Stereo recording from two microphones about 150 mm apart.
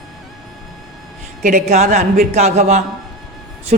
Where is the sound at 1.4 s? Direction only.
55° right (ahead or behind).